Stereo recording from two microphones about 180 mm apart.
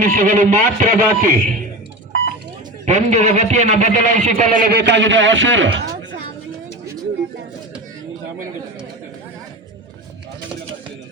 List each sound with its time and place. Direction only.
0.0 s speech: 45° right (ahead or behind)
2.8 s speech: 40° right (ahead or behind)
4.8 s a man's voice: 85° right